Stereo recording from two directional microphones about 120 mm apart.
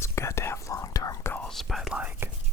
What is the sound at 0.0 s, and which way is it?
Whispering, 20° left (ahead or behind).